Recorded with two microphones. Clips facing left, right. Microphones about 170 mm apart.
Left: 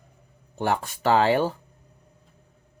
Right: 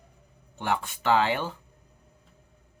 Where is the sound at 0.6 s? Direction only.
40° left (ahead or behind).